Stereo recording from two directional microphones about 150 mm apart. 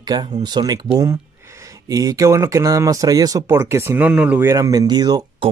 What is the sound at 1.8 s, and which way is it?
Speech, 25° right (ahead or behind).